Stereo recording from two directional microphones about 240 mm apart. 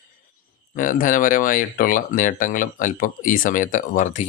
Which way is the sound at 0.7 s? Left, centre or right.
Left.